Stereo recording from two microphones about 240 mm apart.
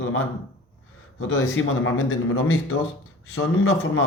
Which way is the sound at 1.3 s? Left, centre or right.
Left.